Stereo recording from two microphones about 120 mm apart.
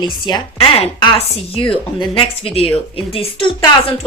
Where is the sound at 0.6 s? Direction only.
50° left (ahead or behind).